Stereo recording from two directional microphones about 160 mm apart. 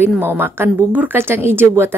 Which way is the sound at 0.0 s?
15° right (ahead or behind).